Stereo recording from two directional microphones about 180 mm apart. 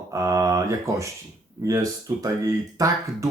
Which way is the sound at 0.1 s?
15° right (ahead or behind).